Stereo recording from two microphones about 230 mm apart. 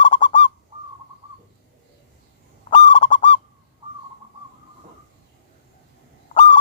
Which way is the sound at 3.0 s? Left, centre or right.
Left.